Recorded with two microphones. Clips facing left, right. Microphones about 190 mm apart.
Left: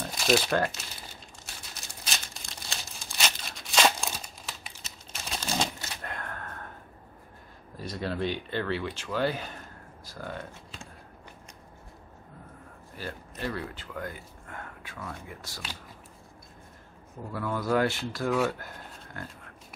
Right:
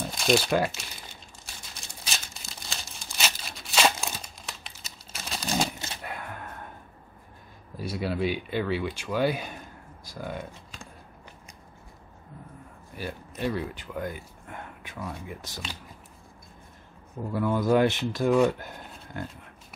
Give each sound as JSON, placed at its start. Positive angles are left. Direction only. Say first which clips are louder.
{"t": 0.0, "sound": "speech", "louder": "right 1 dB", "side_deg": 0}
{"t": 2.0, "sound": "tearing", "louder": "even", "side_deg": 0}
{"t": 6.0, "sound": "gasp", "louder": "even", "side_deg": -10}
{"t": 7.7, "sound": "speech", "louder": "right 3 dB", "side_deg": -10}
{"t": 12.9, "sound": "speech", "louder": "right 3 dB", "side_deg": -15}
{"t": 17.3, "sound": "speech", "louder": "right 5 dB", "side_deg": -20}